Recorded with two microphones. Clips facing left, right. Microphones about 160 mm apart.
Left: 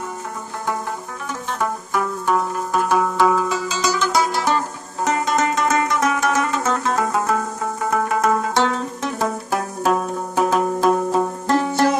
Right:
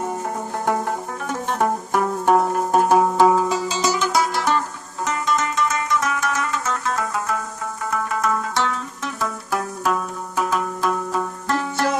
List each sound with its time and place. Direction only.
1.6 s music: 45° right (ahead or behind); by 4.0 s 30° right (ahead or behind)
4.0 s music: 5° right (ahead or behind)
4.4 s music: 5° left (ahead or behind)
5.1 s music: 75° left (ahead or behind)
6.0 s music: 25° left (ahead or behind)
7.9 s music: 50° left (ahead or behind); by 12.0 s 20° left (ahead or behind)